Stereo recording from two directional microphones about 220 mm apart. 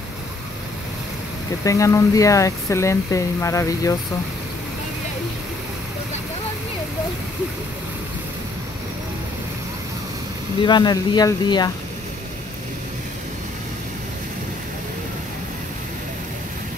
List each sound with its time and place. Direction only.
1.6 s speech: 15° left (ahead or behind)
10.6 s speech: 20° left (ahead or behind)